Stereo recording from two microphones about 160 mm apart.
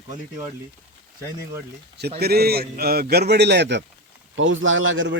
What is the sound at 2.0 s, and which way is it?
A man's voice, 85° right.